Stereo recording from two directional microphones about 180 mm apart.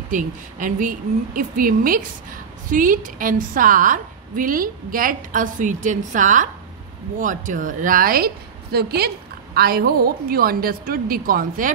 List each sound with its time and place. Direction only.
0.1 s a woman's voice: 50° right (ahead or behind)